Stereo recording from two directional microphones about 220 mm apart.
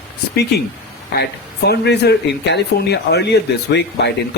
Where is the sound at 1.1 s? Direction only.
50° left (ahead or behind).